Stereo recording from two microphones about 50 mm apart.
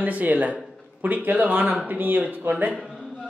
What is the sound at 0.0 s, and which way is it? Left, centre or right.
A man's voice, right.